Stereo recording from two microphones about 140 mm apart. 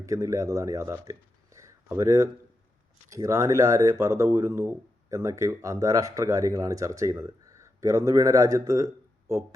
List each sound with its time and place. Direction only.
0.0 s speech: 20° right (ahead or behind)
1.5 s a sound: 20° right (ahead or behind)
3.1 s speech: 25° right (ahead or behind)